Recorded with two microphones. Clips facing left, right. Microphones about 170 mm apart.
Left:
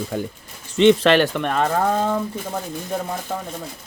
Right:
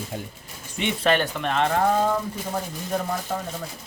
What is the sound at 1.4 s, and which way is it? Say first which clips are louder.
Speech: left 3 dB; 50° left (ahead or behind).